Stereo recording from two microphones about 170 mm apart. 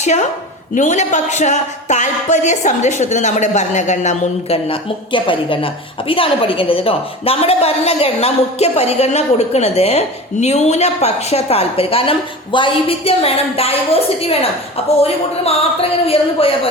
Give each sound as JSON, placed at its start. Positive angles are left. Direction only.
{"t": 0.0, "sound": "a woman's voice", "side_deg": 45}